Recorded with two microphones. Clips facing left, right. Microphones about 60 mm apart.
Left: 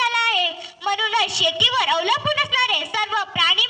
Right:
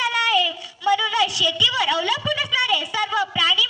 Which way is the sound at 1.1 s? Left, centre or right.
Left.